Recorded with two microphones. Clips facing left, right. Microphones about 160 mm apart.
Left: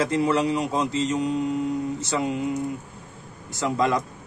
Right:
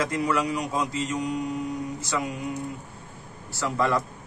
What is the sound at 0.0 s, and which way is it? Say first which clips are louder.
Speech: left 4 dB; 25° left (ahead or behind).